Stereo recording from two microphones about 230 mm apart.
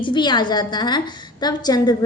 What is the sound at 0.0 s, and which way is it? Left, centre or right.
A woman's voice, centre.